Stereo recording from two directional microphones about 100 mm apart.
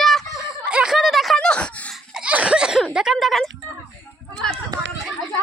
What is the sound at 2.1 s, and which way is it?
Giggle, 10° right (ahead or behind).